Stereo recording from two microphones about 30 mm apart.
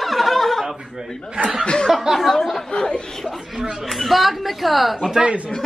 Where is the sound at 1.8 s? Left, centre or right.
Centre.